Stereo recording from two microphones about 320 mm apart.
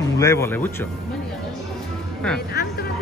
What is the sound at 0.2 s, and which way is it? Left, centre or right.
Speech, centre.